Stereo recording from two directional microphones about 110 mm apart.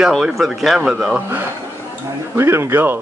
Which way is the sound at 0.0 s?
Centre (ahead or behind).